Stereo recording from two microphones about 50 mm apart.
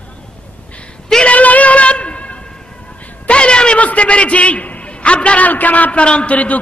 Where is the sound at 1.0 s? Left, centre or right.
Centre.